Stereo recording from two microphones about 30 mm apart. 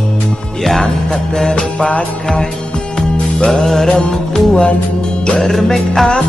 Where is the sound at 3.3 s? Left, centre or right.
Left.